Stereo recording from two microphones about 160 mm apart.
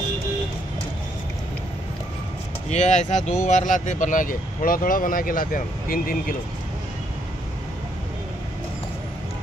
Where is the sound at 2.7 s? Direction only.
45° left (ahead or behind).